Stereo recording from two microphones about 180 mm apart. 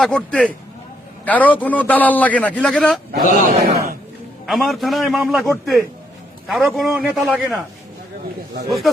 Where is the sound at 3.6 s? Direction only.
55° right (ahead or behind).